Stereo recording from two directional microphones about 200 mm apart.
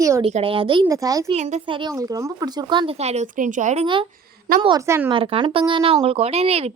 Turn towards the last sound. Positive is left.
turn(degrees=-30)  # may be behind; listen again after turning